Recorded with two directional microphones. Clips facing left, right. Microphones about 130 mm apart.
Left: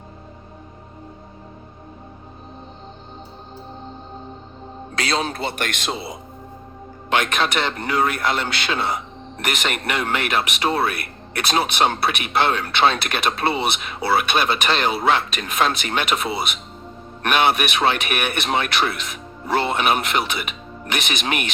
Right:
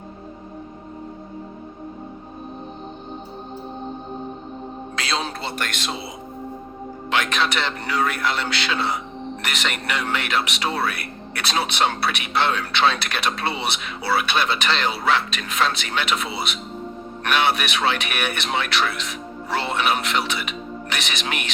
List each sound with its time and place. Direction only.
4.9 s speech: 50° left (ahead or behind)
7.1 s speech: 50° left (ahead or behind)